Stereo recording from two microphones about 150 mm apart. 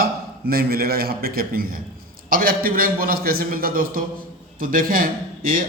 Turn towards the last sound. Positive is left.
turn(degrees=-70)  # may be behind; listen again after turning